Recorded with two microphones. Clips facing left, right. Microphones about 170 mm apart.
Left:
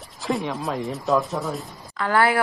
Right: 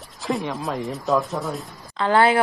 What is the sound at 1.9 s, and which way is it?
Speech, 25° right (ahead or behind).